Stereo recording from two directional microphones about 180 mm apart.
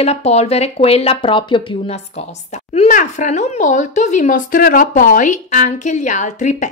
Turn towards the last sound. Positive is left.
turn(degrees=45)  # may be behind; listen again after turning